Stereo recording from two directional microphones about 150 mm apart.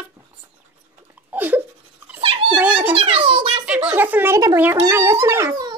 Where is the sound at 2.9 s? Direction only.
35° right (ahead or behind).